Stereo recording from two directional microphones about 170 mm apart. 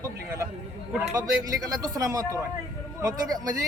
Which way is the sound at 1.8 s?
20° right (ahead or behind).